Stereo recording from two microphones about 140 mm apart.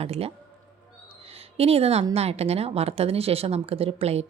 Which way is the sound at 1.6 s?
45° right (ahead or behind).